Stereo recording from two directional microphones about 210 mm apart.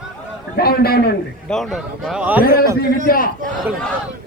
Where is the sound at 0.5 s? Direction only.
45° left (ahead or behind).